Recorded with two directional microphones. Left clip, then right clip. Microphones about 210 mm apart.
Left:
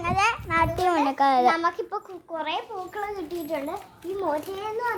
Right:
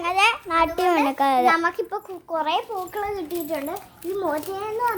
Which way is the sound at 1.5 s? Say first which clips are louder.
Right 3 dB; 30° right (ahead or behind).